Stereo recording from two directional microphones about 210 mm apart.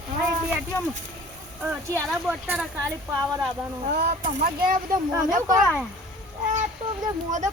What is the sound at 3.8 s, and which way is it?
Speech, 50° right (ahead or behind).